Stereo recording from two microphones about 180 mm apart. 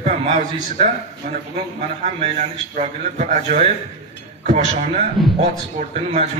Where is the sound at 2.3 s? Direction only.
40° right (ahead or behind).